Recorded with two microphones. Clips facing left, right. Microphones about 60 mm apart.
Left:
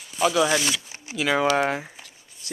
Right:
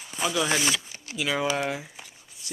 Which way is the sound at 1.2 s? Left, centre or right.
Left.